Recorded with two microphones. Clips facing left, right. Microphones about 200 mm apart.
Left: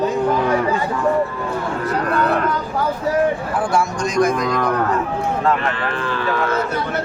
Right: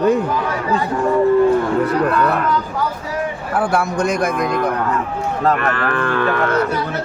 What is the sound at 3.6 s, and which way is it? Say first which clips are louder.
A man's voice: right 5 dB; 60° right (ahead or behind).